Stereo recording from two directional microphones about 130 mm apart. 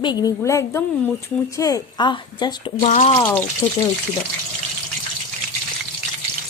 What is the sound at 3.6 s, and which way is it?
Speech, 20° left (ahead or behind).